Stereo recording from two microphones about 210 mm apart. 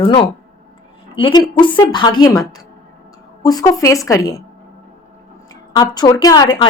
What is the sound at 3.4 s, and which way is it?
Speech, 15° left (ahead or behind).